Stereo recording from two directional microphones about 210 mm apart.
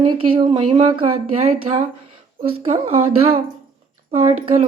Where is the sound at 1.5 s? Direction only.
30° right (ahead or behind).